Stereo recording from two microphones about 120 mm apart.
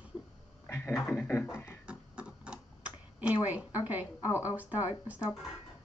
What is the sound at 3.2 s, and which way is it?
Speech, 10° right (ahead or behind).